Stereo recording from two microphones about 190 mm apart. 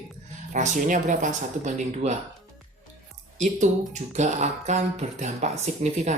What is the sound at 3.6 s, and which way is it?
Speech, 40° right (ahead or behind).